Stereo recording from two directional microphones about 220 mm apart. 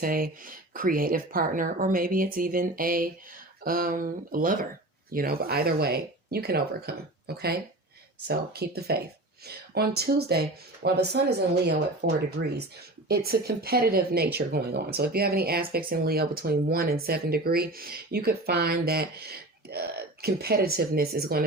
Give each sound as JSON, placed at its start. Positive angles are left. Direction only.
{"t": 0.0, "sound": "speech", "side_deg": -40}